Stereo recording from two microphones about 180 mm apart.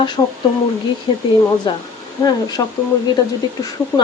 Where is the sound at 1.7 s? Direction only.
25° left (ahead or behind).